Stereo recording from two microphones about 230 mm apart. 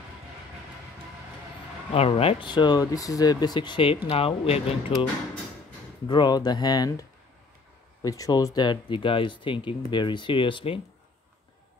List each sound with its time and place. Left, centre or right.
2.0 s speech: left
6.0 s speech: centre